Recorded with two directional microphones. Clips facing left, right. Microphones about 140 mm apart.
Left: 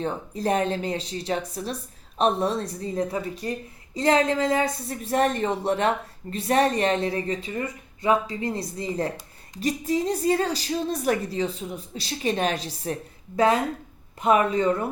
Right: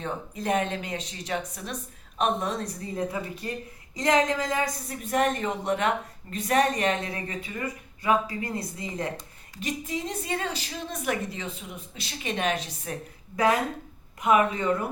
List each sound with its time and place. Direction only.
0.0 s speech: 35° left (ahead or behind)